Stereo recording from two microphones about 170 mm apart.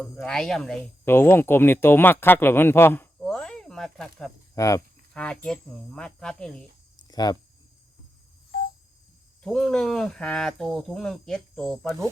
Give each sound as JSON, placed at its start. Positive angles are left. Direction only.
{"t": 0.0, "sound": "speech", "side_deg": 5}
{"t": 1.0, "sound": "speech", "side_deg": 15}
{"t": 4.5, "sound": "speech", "side_deg": 20}
{"t": 5.1, "sound": "speech", "side_deg": 5}
{"t": 7.1, "sound": "speech", "side_deg": 25}
{"t": 9.4, "sound": "speech", "side_deg": 5}